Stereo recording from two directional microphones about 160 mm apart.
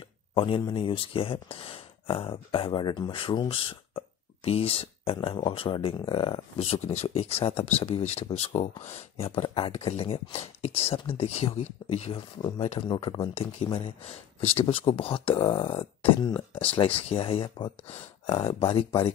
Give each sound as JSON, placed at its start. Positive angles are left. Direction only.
{"t": 0.3, "sound": "speech", "side_deg": 30}
{"t": 6.8, "sound": "speech", "side_deg": 45}